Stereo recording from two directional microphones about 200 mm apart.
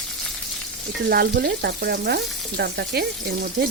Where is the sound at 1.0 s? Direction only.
50° right (ahead or behind).